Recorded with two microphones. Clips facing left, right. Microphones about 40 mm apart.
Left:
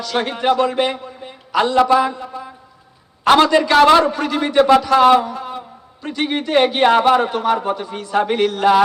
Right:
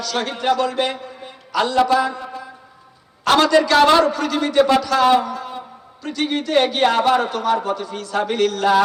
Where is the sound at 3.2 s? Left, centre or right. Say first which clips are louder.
Left 2 dB; left.